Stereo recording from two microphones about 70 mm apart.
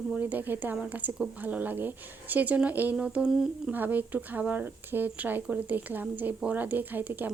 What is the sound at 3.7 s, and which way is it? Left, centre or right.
Speech, right.